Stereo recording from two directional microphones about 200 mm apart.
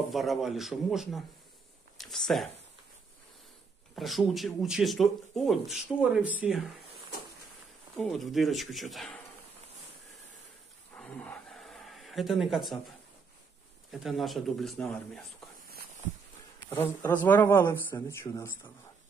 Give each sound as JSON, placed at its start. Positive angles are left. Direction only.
{"t": 0.1, "sound": "speech", "side_deg": 0}
{"t": 2.0, "sound": "a sound", "side_deg": 0}
{"t": 3.9, "sound": "speech", "side_deg": 0}
{"t": 7.9, "sound": "speech", "side_deg": 0}
{"t": 11.0, "sound": "a sound", "side_deg": 5}
{"t": 13.9, "sound": "speech", "side_deg": 0}
{"t": 16.8, "sound": "speech", "side_deg": 10}